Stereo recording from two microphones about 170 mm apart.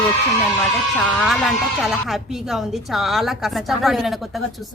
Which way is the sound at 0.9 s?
Centre (ahead or behind).